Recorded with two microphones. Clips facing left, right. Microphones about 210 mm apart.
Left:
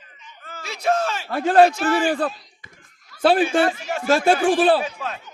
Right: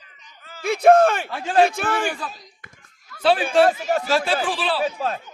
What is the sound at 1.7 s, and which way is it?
Speech, 55° right (ahead or behind).